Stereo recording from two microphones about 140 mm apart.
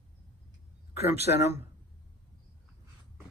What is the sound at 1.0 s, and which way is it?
Speech, 15° right (ahead or behind).